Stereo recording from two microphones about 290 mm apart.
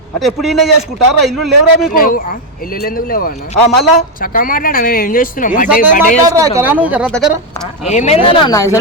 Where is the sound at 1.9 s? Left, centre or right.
Left.